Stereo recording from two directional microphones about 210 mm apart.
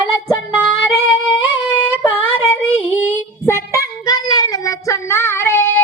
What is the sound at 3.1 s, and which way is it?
Child singing, 15° left (ahead or behind).